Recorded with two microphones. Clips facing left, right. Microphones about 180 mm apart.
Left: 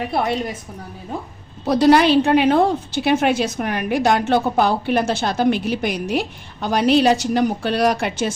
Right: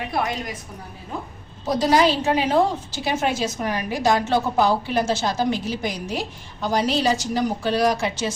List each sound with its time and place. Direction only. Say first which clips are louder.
0.1 s a woman's voice: left 3 dB; 30° left (ahead or behind)
1.6 s a woman's voice: left 5 dB; 65° left (ahead or behind)